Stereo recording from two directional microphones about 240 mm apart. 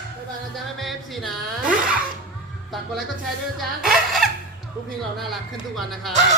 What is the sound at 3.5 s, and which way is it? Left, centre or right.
Music, centre.